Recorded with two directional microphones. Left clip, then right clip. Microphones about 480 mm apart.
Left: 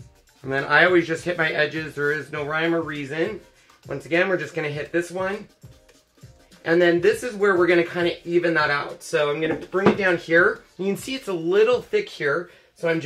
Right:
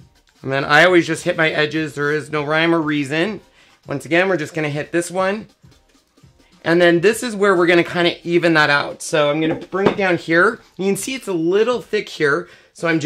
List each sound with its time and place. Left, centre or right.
0.4 s speech: right
6.6 s speech: right
10.8 s speech: centre